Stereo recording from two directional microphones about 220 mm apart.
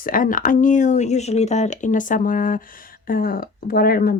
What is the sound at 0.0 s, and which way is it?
Speech, 40° left (ahead or behind).